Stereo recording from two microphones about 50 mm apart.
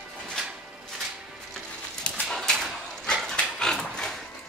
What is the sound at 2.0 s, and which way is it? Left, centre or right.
Dog, centre.